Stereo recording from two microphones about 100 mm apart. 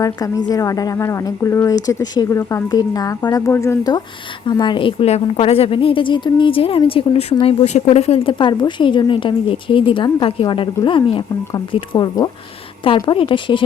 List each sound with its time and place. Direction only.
0.0 s speech: 40° left (ahead or behind)
4.6 s speech: 55° left (ahead or behind)
11.9 s speech: 45° left (ahead or behind)
13.0 s speech: 55° left (ahead or behind)